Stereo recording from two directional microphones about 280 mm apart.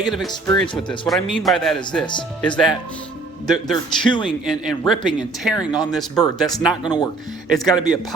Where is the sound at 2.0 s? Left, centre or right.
Centre.